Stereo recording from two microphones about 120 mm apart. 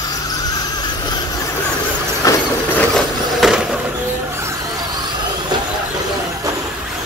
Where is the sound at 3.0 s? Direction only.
Centre (ahead or behind).